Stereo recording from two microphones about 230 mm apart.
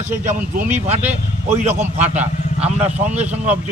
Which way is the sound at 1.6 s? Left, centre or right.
Centre.